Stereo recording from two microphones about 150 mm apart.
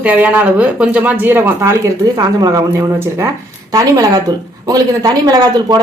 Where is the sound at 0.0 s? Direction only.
10° right (ahead or behind).